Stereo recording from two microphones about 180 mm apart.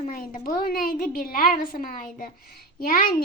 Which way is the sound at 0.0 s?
50° left (ahead or behind).